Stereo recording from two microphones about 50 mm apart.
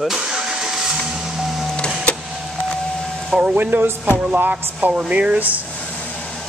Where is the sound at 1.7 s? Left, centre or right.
Left.